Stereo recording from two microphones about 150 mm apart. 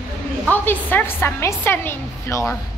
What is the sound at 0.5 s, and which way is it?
A woman's voice, 10° left (ahead or behind).